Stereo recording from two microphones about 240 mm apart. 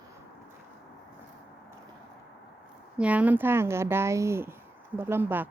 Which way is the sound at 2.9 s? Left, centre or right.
Centre.